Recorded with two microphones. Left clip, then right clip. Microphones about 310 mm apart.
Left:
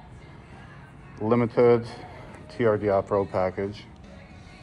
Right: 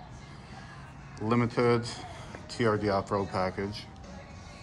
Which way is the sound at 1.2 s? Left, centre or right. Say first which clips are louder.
Left 7 dB; centre.